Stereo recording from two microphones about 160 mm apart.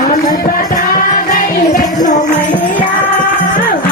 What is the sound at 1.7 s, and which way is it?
Music, 55° left (ahead or behind).